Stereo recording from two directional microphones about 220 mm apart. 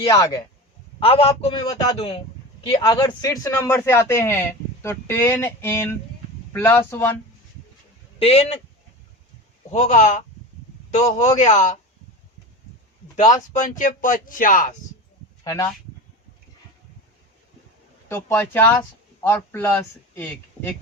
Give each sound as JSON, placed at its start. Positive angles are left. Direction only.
{"t": 0.0, "sound": "a man's voice", "side_deg": 15}
{"t": 8.2, "sound": "a man's voice", "side_deg": 30}
{"t": 9.7, "sound": "speech", "side_deg": 35}
{"t": 11.3, "sound": "speech", "side_deg": 35}
{"t": 13.1, "sound": "speech", "side_deg": 35}
{"t": 15.4, "sound": "speech", "side_deg": 15}
{"t": 18.1, "sound": "speech", "side_deg": 10}